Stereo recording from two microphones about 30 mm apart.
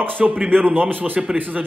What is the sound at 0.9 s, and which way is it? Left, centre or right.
Speech, right.